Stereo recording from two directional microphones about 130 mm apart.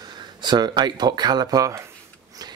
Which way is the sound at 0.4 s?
35° right (ahead or behind).